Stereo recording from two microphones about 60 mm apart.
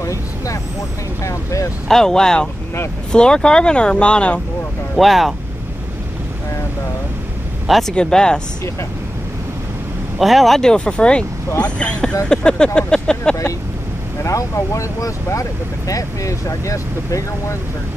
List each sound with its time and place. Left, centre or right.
0.0 s speech: left
1.9 s speech: centre
4.9 s speech: centre
7.6 s speech: centre
7.9 s speech: centre
10.1 s speech: centre
14.2 s speech: left